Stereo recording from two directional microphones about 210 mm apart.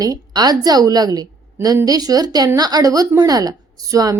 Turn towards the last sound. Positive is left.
turn(degrees=-15)  # may be behind; listen again after turning